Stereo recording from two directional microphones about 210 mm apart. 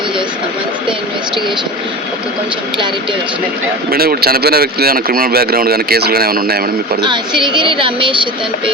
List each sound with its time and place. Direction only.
3.9 s speech: 45° right (ahead or behind)
7.0 s speech: 20° right (ahead or behind)